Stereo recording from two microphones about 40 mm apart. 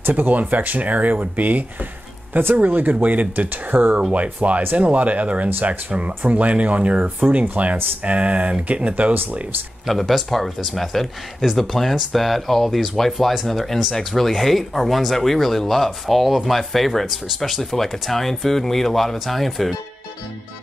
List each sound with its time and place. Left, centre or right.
0.1 s speech: right
9.8 s speech: centre